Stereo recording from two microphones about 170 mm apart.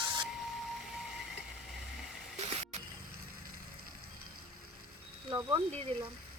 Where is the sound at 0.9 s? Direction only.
Centre (ahead or behind).